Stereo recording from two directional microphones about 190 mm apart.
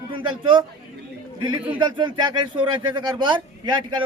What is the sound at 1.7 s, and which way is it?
Speech, 25° right (ahead or behind).